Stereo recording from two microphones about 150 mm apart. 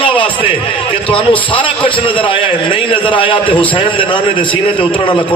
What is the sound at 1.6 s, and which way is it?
A man's voice, 35° left (ahead or behind).